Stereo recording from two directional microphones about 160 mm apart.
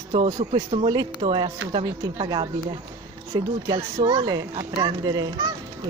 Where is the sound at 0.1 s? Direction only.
30° right (ahead or behind).